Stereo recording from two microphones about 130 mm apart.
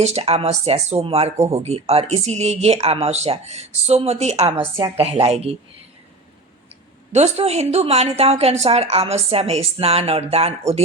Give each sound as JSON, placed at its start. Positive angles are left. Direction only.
{"t": 0.0, "sound": "a woman's voice", "side_deg": -50}
{"t": 4.5, "sound": "a woman's voice", "side_deg": -40}
{"t": 7.1, "sound": "a woman's voice", "side_deg": -60}